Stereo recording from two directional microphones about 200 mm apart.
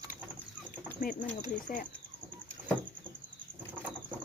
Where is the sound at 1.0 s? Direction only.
45° left (ahead or behind).